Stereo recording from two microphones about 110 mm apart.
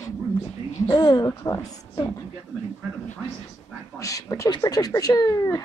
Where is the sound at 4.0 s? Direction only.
30° left (ahead or behind).